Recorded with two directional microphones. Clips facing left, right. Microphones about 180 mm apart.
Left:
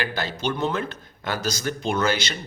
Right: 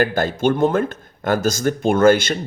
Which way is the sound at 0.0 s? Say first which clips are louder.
Right 9 dB; 50° right (ahead or behind).